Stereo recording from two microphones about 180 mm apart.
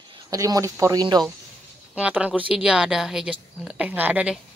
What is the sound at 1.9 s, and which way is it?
A woman's voice, 5° right (ahead or behind).